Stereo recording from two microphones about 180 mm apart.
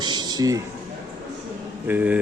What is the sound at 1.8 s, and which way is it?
Speech, 10° right (ahead or behind).